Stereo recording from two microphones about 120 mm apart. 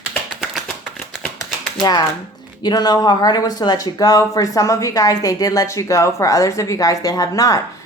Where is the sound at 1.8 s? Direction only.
35° left (ahead or behind).